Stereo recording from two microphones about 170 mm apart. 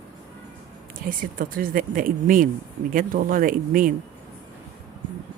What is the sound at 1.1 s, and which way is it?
Speech, 55° right (ahead or behind).